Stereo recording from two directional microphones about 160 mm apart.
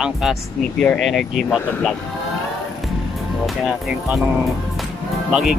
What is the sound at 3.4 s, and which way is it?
Speech, centre (ahead or behind).